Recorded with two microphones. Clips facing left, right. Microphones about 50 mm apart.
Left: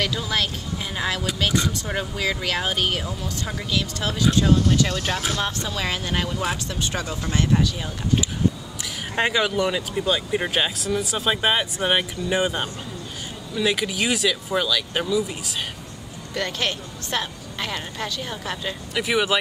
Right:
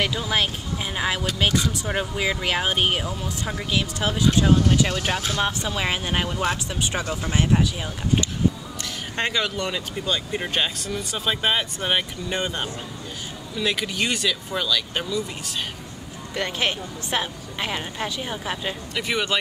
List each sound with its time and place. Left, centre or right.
0.0 s a woman's voice: centre
9.1 s speech: centre
16.3 s a woman's voice: centre
18.9 s speech: centre